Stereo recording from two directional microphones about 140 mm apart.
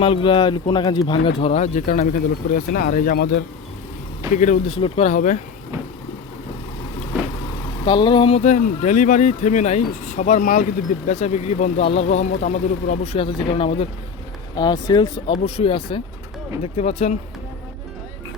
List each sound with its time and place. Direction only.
0.0 s speech: 40° left (ahead or behind); by 3.3 s 85° left
4.4 s speech: 60° left (ahead or behind)
4.7 s speech: 45° left (ahead or behind)
5.1 s speech: 65° left (ahead or behind)
7.9 s speech: 35° left (ahead or behind)
8.4 s speech: 60° left (ahead or behind)
13.1 s speech: 35° left (ahead or behind)
14.5 s speech: 30° left (ahead or behind)
15.3 s speech: 40° left (ahead or behind)